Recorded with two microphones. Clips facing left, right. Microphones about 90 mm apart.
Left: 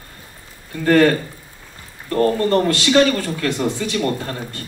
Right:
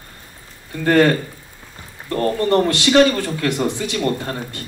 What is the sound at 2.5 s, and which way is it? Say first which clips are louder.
A man's voice: right 1 dB; 25° right (ahead or behind).